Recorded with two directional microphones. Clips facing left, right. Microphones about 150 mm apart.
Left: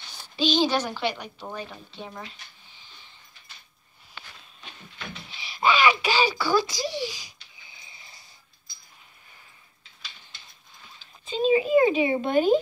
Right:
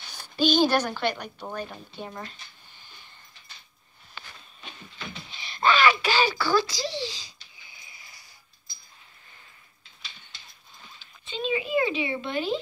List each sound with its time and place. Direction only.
0.1 s a woman's voice: centre (ahead or behind)
5.3 s a sound: 5° left (ahead or behind); by 8.2 s 25° left (ahead or behind)
11.0 s speech: 40° left (ahead or behind)